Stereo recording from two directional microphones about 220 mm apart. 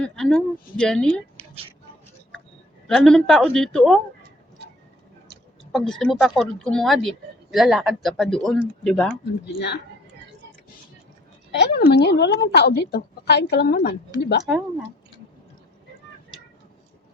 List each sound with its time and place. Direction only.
0.0 s speech: centre (ahead or behind)
2.8 s speech: centre (ahead or behind)
5.7 s speech: centre (ahead or behind)
11.5 s a woman's voice: 50° left (ahead or behind)